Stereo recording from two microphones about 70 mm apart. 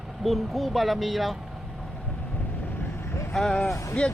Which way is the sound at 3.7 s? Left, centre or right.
Left.